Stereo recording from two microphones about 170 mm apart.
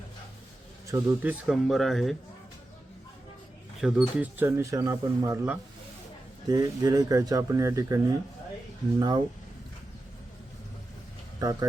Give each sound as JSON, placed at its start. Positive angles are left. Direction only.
{"t": 0.9, "sound": "speech", "side_deg": -20}
{"t": 1.3, "sound": "speech", "side_deg": 0}
{"t": 3.8, "sound": "speech", "side_deg": -5}
{"t": 11.3, "sound": "speech", "side_deg": -20}